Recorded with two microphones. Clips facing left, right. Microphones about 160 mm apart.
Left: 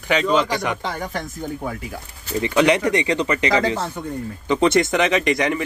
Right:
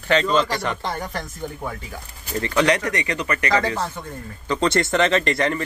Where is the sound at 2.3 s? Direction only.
15° left (ahead or behind).